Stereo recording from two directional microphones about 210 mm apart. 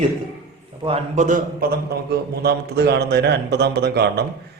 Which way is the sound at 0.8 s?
30° right (ahead or behind).